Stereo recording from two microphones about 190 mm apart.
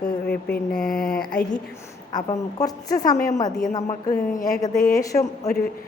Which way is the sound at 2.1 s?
20° left (ahead or behind).